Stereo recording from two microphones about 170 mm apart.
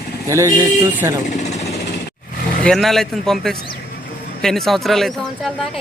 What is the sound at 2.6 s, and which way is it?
Speech, centre (ahead or behind).